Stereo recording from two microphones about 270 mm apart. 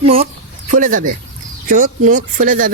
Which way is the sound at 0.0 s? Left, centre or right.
Right.